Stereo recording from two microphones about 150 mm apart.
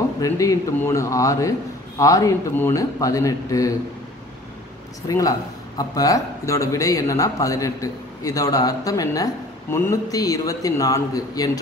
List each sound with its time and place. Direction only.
0.2 s a man's voice: 20° left (ahead or behind)
5.0 s a man's voice: 20° left (ahead or behind)